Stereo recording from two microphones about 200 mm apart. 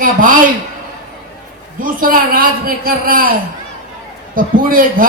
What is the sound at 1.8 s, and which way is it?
A man's voice, 45° right (ahead or behind).